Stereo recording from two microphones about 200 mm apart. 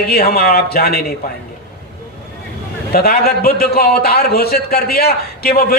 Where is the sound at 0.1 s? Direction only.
50° left (ahead or behind).